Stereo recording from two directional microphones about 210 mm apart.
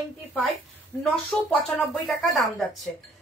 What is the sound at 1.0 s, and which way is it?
Speech, 5° left (ahead or behind).